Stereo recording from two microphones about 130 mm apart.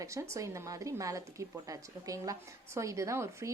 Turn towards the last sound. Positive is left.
turn(degrees=-20)  # may be behind; listen again after turning